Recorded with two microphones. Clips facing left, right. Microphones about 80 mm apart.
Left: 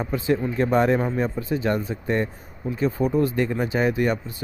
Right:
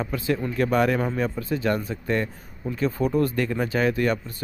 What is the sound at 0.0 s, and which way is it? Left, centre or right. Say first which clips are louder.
Speech: left 3 dB; left.